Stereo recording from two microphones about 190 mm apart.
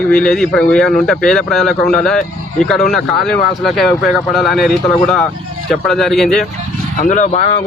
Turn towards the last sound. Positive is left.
turn(degrees=35)  # may be behind; listen again after turning